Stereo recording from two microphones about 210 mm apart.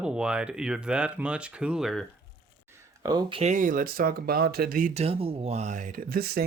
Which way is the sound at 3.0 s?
20° right (ahead or behind).